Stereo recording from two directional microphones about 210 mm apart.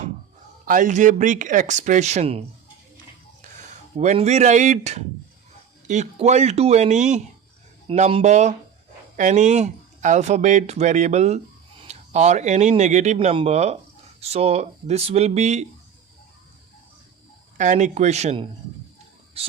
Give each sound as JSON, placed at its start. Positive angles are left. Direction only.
{"t": 0.6, "sound": "speech", "side_deg": -40}
{"t": 3.4, "sound": "a sound", "side_deg": -35}
{"t": 3.9, "sound": "speech", "side_deg": -30}
{"t": 17.6, "sound": "speech", "side_deg": -35}
{"t": 19.4, "sound": "whispering", "side_deg": -30}